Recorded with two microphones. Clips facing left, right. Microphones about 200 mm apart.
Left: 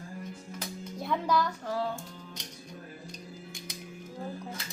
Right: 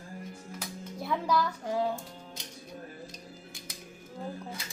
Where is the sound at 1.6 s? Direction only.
15° right (ahead or behind).